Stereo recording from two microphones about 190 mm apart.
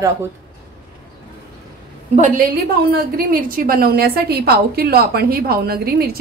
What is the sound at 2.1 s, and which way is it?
A woman's voice, 40° right (ahead or behind).